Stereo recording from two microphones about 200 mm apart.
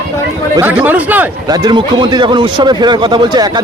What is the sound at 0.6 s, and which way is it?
Speech, 10° right (ahead or behind).